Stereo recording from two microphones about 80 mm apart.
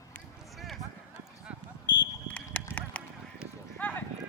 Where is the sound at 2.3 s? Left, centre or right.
Centre.